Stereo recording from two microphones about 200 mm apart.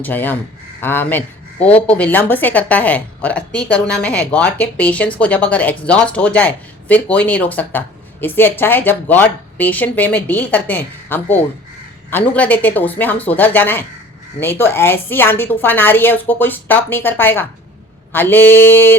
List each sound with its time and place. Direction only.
0.0 s speech: 10° left (ahead or behind)